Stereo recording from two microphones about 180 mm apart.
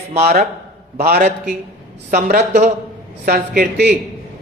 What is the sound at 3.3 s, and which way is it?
Speech, 60° right (ahead or behind).